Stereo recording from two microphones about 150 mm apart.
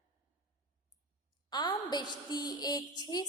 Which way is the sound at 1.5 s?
30° left (ahead or behind).